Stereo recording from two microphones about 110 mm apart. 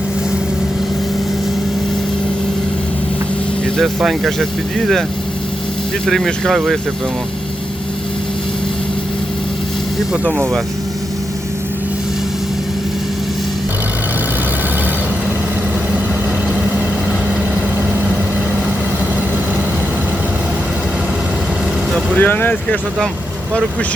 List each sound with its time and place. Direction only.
3.8 s speech: centre (ahead or behind)
6.1 s speech: 5° left (ahead or behind)
21.9 s speech: 15° left (ahead or behind)